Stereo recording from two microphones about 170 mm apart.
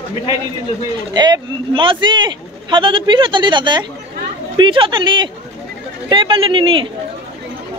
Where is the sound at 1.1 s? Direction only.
25° right (ahead or behind).